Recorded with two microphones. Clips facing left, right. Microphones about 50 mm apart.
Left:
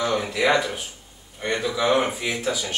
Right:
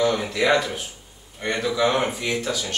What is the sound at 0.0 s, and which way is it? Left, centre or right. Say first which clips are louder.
Speech: right 1 dB; centre.